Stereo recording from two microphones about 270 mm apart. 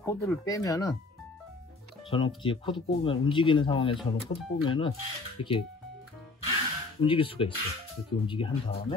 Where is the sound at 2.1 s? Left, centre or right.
Centre.